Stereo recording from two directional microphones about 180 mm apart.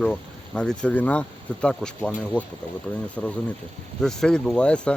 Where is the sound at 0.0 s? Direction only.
5° left (ahead or behind).